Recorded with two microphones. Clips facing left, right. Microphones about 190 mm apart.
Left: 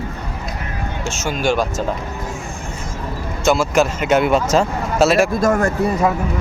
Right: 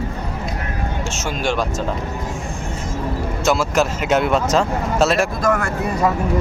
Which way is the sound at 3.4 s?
Centre (ahead or behind).